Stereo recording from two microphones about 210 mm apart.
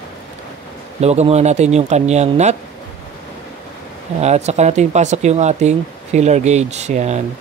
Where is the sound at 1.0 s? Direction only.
30° right (ahead or behind).